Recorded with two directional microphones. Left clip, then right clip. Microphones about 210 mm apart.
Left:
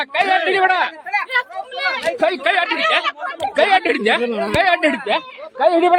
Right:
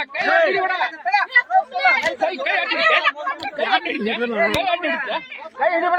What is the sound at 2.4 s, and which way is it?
Speech, 30° left (ahead or behind).